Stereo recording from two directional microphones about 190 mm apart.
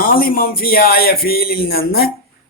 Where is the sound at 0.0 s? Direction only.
50° left (ahead or behind).